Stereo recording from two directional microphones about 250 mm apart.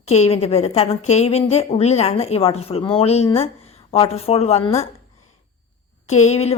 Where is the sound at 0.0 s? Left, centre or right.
Left.